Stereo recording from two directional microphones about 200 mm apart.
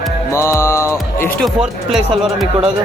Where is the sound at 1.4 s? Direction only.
Centre (ahead or behind).